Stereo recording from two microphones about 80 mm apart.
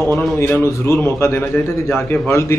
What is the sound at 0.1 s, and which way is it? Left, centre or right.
A man's voice, left.